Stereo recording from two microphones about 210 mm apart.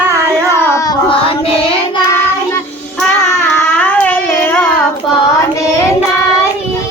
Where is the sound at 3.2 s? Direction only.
5° left (ahead or behind).